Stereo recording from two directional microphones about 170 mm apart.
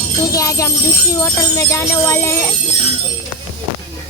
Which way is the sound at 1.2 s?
15° left (ahead or behind).